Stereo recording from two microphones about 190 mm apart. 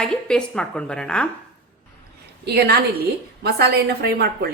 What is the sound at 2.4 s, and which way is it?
A woman's voice, 55° right (ahead or behind).